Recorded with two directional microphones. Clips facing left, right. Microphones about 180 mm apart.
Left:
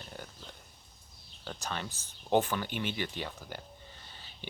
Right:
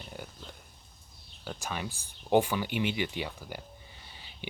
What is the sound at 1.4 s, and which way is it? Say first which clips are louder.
Speech: right 2 dB; 10° right (ahead or behind).